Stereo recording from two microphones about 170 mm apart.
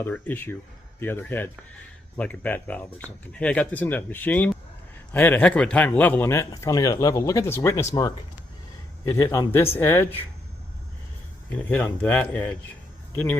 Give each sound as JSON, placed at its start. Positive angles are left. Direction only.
{"t": 0.0, "sound": "a man's voice", "side_deg": 10}
{"t": 11.4, "sound": "a man's voice", "side_deg": 10}